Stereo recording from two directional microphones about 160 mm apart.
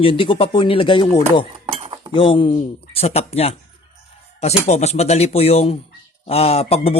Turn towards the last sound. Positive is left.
turn(degrees=40)  # may be behind; listen again after turning